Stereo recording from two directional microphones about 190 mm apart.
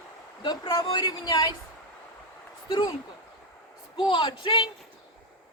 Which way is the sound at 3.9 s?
25° left (ahead or behind).